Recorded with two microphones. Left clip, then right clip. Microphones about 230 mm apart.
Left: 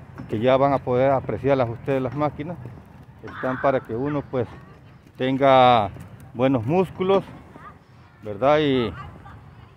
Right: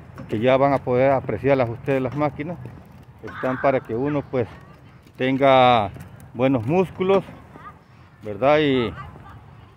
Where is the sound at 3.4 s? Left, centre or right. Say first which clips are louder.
Right 1 dB; centre.